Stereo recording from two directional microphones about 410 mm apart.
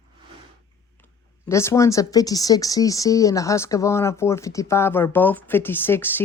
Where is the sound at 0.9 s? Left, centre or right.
Centre.